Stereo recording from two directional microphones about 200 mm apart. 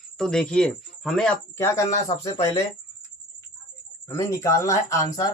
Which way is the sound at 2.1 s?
25° left (ahead or behind).